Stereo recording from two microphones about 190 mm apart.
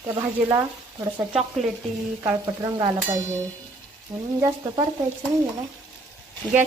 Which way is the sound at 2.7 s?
20° right (ahead or behind).